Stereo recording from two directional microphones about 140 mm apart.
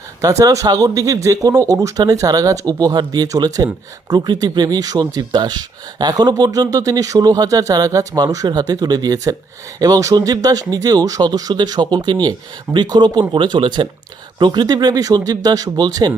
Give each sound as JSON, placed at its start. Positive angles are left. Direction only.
{"t": 0.2, "sound": "speech", "side_deg": -25}